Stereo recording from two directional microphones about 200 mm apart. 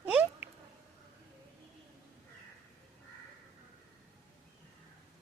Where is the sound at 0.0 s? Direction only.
5° right (ahead or behind).